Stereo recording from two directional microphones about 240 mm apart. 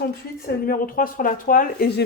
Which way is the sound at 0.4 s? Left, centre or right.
Left.